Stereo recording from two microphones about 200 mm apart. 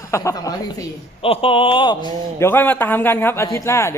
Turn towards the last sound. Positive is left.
turn(degrees=15)  # may be behind; listen again after turning